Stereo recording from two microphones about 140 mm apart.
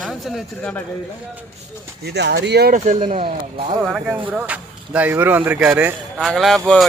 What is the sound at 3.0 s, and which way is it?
Speech, 40° right (ahead or behind).